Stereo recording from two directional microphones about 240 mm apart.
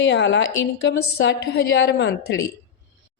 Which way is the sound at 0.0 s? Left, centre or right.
Left.